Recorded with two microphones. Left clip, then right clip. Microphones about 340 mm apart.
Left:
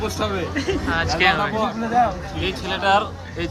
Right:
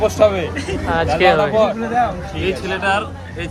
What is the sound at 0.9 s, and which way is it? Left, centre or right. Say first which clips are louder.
Speech: right 6 dB; centre.